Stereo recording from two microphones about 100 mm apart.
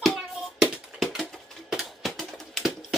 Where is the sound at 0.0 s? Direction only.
5° right (ahead or behind).